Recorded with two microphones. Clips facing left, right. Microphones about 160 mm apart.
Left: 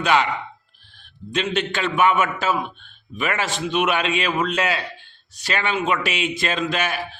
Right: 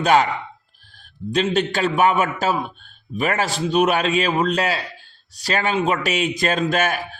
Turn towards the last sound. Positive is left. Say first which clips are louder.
# right 3 dB
turn(degrees=-45)  # may be behind; listen again after turning